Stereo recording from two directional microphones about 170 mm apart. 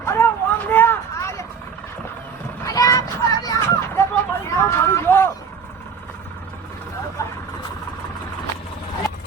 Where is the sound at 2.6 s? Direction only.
20° left (ahead or behind).